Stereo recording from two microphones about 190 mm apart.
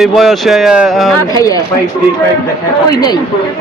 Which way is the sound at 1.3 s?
20° left (ahead or behind).